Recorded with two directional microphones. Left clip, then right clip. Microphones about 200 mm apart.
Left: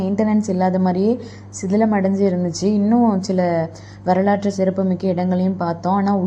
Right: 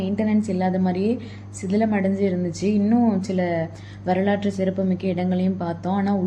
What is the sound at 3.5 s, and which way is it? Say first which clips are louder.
A woman's voice: left 5 dB; 15° left (ahead or behind).